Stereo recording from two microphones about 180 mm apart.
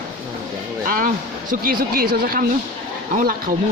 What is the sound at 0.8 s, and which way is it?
A woman's voice, 50° right (ahead or behind).